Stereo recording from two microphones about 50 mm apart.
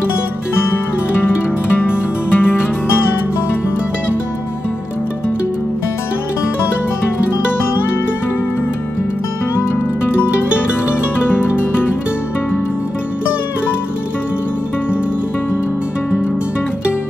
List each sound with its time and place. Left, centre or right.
1.8 s music: left
11.2 s music: left